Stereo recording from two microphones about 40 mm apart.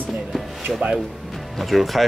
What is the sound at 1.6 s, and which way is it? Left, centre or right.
Speech, centre.